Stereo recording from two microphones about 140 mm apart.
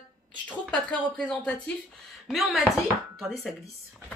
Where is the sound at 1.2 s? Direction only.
5° left (ahead or behind).